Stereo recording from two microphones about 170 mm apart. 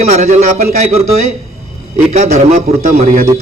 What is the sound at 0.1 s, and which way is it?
Speech, 45° right (ahead or behind).